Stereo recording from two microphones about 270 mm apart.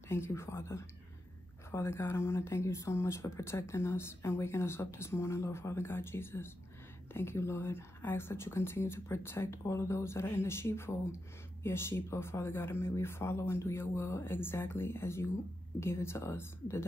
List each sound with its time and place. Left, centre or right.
0.1 s speech: centre